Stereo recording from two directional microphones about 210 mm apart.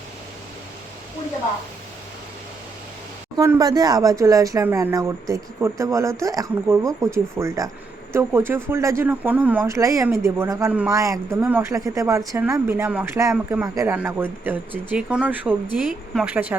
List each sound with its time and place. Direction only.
3.3 s speech: 15° right (ahead or behind)